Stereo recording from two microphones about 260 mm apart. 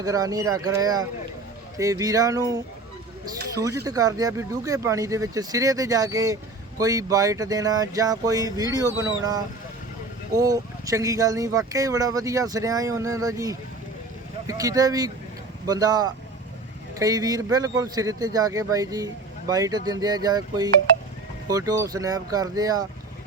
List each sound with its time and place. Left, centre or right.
0.0 s speech: centre